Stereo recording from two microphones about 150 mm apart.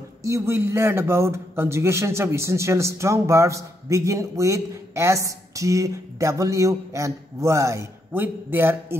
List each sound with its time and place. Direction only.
0.2 s a man's voice: 20° right (ahead or behind)